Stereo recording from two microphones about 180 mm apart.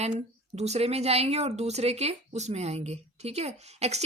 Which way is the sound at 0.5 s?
35° right (ahead or behind).